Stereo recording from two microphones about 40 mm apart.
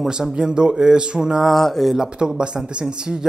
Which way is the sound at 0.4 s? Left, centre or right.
Right.